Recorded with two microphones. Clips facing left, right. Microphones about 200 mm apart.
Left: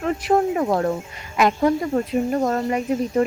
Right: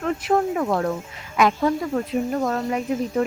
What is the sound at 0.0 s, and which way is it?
Speech, 5° left (ahead or behind).